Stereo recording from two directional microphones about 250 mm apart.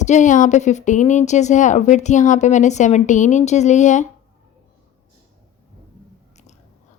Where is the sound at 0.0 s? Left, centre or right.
Left.